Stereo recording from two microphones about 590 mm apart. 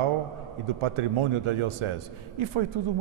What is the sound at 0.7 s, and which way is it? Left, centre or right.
A man's voice, right.